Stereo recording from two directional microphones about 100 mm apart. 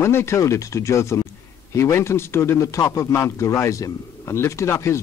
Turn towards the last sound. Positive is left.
turn(degrees=30)  # may be behind; listen again after turning